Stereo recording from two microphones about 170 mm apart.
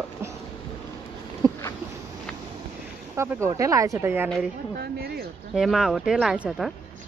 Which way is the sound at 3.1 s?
15° right (ahead or behind).